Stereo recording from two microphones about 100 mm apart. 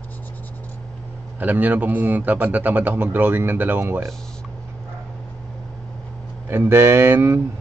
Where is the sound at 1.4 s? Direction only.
15° right (ahead or behind).